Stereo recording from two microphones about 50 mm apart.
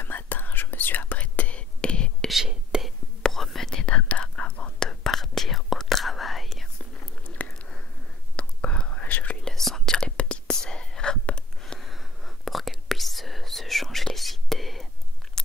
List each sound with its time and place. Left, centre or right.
0.0 s whispering: left
1.1 s whispering: left
2.7 s whispering: centre
3.3 s whispering: centre
3.8 s whispering: left; by 6.7 s centre
7.2 s a sound: left
8.4 s whispering: left
9.5 s whispering: centre
11.7 s a sound: centre
12.4 s whispering: centre
15.4 s chewing: centre